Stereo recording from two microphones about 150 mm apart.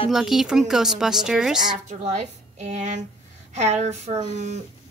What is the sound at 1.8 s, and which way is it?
Speech, 50° right (ahead or behind).